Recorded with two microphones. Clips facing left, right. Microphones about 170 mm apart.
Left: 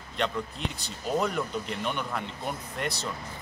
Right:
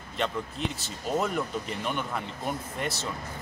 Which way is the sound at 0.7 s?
5° right (ahead or behind).